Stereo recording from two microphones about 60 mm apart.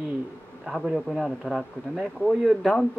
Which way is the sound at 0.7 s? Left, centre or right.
Centre.